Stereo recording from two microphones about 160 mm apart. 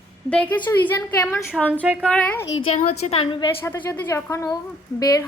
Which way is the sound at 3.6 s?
15° left (ahead or behind).